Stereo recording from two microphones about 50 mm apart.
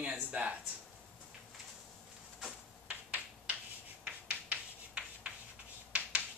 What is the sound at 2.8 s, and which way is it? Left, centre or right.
Finger snapping, right.